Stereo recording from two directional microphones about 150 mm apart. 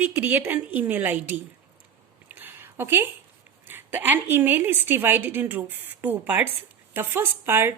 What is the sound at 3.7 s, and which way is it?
A woman's voice, 15° right (ahead or behind).